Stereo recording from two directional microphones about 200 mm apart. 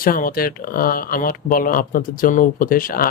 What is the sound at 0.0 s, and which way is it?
Speech, 45° left (ahead or behind).